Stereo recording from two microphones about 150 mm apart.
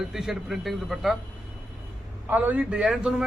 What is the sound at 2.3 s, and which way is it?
Speech, 10° right (ahead or behind).